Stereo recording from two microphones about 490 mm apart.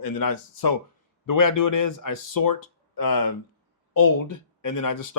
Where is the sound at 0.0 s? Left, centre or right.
Left.